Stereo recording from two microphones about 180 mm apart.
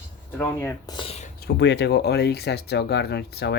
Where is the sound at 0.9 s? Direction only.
35° left (ahead or behind).